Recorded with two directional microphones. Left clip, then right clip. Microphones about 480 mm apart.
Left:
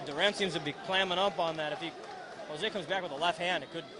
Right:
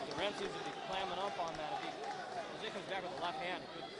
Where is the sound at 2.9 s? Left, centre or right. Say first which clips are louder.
Left 8 dB; left.